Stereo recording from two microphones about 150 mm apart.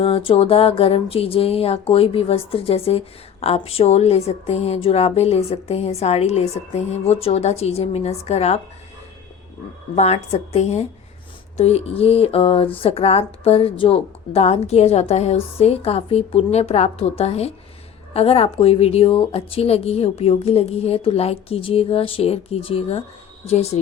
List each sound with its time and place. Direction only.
0.0 s a woman's voice: 35° left (ahead or behind)
9.9 s a woman's voice: 45° left (ahead or behind)